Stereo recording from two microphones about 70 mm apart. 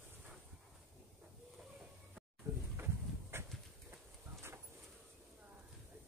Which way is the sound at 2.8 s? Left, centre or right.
Right.